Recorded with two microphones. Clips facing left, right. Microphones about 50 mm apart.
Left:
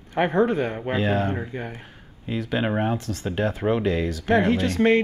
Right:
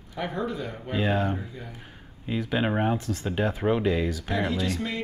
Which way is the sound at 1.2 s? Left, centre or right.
Left.